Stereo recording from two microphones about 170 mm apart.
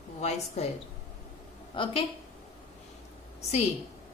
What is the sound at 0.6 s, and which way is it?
Speech, 40° left (ahead or behind).